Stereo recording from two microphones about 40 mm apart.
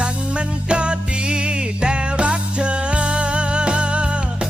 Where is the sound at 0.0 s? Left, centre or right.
Right.